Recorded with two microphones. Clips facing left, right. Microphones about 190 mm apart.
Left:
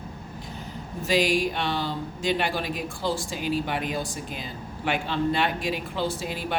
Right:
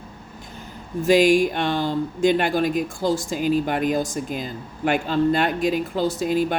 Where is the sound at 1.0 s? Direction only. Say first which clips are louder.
Right 7 dB; 50° right (ahead or behind).